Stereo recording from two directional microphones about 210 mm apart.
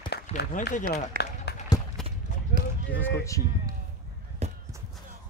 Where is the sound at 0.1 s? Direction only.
50° left (ahead or behind).